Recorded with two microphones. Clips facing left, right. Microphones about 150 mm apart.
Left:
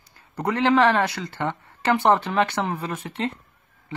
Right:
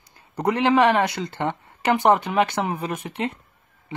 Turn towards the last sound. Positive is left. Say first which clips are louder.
# right 1 dB
turn(degrees=-15)  # may be behind; listen again after turning